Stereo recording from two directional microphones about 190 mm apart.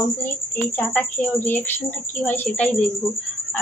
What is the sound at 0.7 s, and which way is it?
A woman's voice, 10° left (ahead or behind).